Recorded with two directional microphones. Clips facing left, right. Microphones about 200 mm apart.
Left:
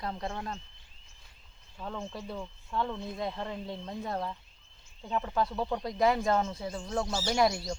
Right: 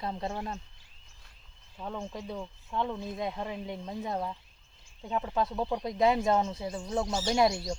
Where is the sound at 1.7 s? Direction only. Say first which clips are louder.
Right 1 dB; 10° right (ahead or behind).